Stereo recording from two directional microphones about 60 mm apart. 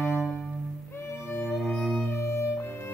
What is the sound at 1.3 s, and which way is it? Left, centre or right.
Music, left.